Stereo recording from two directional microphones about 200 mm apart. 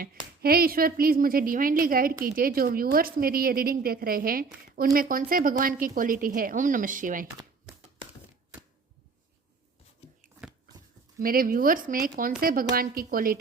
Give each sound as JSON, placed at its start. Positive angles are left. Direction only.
{"t": 0.4, "sound": "a woman's voice", "side_deg": -50}
{"t": 11.2, "sound": "a woman's voice", "side_deg": -45}